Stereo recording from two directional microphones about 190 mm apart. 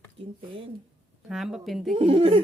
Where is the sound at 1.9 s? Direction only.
30° right (ahead or behind).